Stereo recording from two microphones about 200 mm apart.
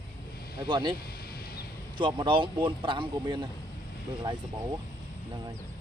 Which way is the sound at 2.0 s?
25° right (ahead or behind).